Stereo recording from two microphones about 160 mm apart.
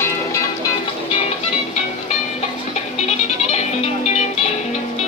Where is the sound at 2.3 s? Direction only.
45° left (ahead or behind).